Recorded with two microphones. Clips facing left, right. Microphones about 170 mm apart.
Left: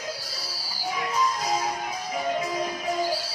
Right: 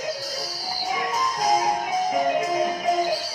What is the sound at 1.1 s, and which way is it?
Music, 45° right (ahead or behind).